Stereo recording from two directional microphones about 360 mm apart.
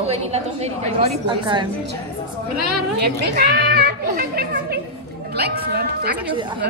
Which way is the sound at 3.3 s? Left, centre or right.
Right.